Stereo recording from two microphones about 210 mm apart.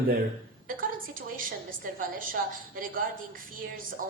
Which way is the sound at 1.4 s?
40° right (ahead or behind).